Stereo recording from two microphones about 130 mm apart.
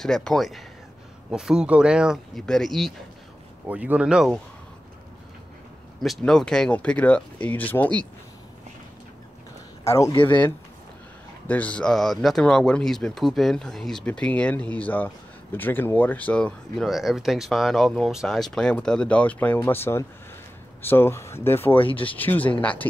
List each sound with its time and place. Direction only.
0.0 s speech: 5° left (ahead or behind)
3.6 s speech: 10° right (ahead or behind)
5.9 s speech: centre (ahead or behind)
9.8 s speech: 25° left (ahead or behind)
21.7 s speech: 45° left (ahead or behind)
22.1 s speech: 15° left (ahead or behind)